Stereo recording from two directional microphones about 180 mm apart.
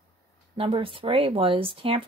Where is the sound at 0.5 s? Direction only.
30° right (ahead or behind).